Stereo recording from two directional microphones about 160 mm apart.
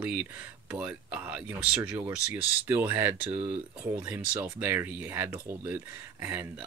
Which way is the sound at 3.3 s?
35° right (ahead or behind).